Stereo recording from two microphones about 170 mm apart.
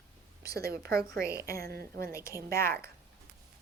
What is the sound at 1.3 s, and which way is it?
Speech, 20° left (ahead or behind).